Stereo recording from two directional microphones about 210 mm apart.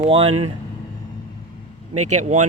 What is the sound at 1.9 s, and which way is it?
Speech, 35° right (ahead or behind).